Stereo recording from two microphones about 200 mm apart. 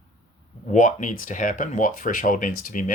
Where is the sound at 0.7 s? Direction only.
40° left (ahead or behind).